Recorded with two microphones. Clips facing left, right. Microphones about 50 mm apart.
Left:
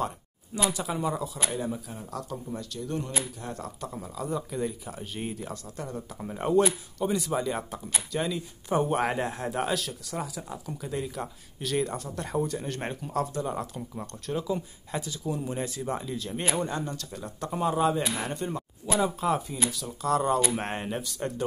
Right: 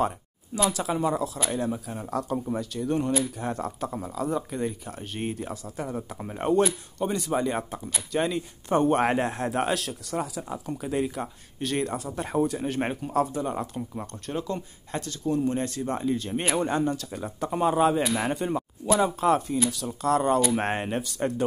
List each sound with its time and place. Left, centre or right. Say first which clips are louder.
0.7 s speech: right 3 dB; centre
1.7 s speech: right 5 dB; centre
4.8 s speech: right 3 dB; centre
10.5 s speech: right 5 dB; centre
12.2 s speech: right 4 dB; centre
12.4 s speech: right 5 dB; centre
16.2 s speech: right 4 dB; centre
16.4 s speech: right 4 dB; right
16.8 s speech: right 7 dB; centre